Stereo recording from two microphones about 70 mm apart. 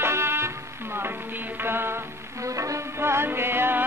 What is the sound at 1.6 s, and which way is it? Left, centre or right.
Music, right.